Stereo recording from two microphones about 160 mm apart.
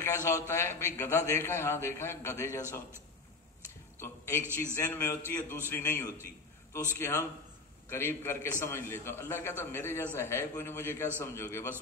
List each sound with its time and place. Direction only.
0.0 s a man's voice: 15° left (ahead or behind)
4.7 s a man's voice: 15° left (ahead or behind)